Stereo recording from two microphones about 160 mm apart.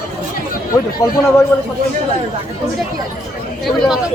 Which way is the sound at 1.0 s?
20° left (ahead or behind).